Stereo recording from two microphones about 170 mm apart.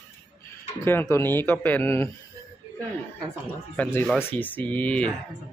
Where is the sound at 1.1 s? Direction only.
15° left (ahead or behind).